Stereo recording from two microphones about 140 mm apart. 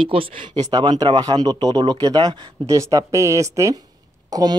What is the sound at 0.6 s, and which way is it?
Speech, 30° right (ahead or behind).